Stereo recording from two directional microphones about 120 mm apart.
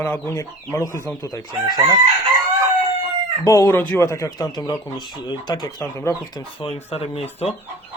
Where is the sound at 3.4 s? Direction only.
25° left (ahead or behind).